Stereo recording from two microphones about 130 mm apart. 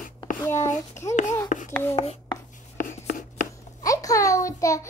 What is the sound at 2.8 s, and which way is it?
Writing, 90° left.